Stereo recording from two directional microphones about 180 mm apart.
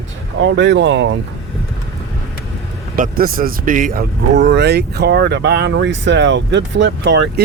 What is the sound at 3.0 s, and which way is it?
Speech, 50° right (ahead or behind).